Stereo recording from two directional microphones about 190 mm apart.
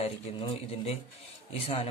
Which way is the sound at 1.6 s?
35° left (ahead or behind).